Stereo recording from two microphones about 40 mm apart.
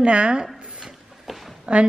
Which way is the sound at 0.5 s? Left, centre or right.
Centre.